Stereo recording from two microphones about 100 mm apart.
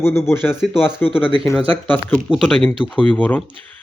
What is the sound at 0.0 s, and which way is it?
Speech, 25° left (ahead or behind).